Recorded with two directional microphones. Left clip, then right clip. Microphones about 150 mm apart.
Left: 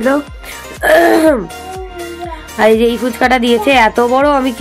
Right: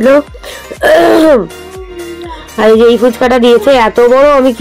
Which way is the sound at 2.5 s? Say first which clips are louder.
Right 5 dB; 15° right (ahead or behind).